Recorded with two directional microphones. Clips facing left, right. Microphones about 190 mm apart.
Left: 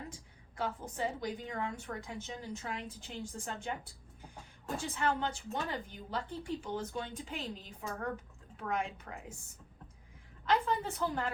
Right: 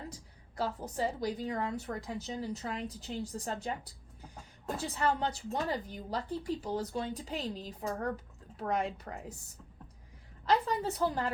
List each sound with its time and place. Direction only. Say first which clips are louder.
0.1 s a woman's voice: right 2 dB; 40° right (ahead or behind)
4.8 s a woman's voice: right 2 dB; 35° right (ahead or behind)
10.4 s a woman's voice: right 2 dB; 35° right (ahead or behind)